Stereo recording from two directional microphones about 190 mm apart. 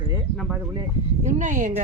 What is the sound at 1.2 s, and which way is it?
Speech, 40° right (ahead or behind).